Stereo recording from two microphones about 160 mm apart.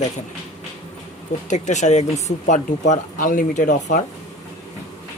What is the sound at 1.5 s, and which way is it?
Speech, 50° left (ahead or behind).